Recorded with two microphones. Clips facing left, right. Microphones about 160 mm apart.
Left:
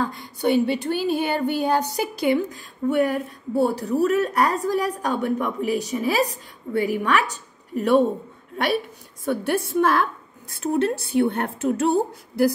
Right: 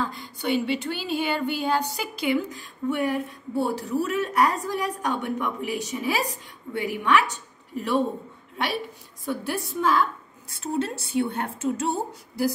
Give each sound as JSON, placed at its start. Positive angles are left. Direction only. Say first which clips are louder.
{"t": 0.0, "sound": "a woman's voice", "louder": "left 6 dB", "side_deg": 45}
{"t": 7.7, "sound": "speech", "louder": "left 7 dB", "side_deg": 50}
{"t": 9.2, "sound": "a woman's voice", "louder": "left 6 dB", "side_deg": 55}